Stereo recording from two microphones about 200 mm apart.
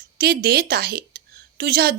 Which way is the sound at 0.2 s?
50° right (ahead or behind).